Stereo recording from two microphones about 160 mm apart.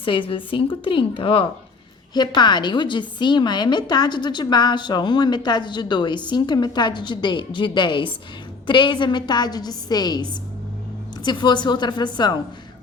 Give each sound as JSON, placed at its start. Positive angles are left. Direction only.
{"t": 0.0, "sound": "a woman's voice", "side_deg": 35}